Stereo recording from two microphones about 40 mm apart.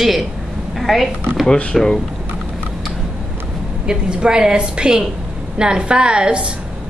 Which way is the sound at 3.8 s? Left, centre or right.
Centre.